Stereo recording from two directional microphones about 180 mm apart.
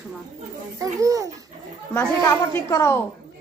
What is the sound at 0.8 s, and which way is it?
Speech, 20° right (ahead or behind).